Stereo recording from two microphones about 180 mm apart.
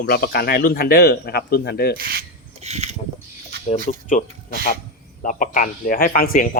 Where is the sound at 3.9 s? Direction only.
40° left (ahead or behind).